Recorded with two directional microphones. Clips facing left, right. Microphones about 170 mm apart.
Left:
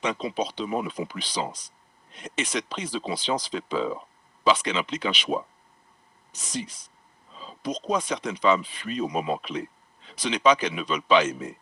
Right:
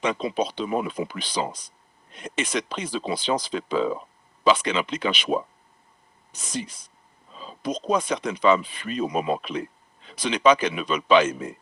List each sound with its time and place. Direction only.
0.0 s speech: 55° right (ahead or behind)